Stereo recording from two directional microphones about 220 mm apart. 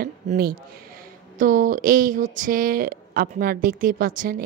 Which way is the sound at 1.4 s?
35° right (ahead or behind).